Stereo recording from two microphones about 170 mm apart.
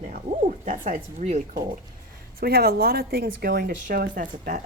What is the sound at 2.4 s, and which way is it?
Speech, 65° right (ahead or behind).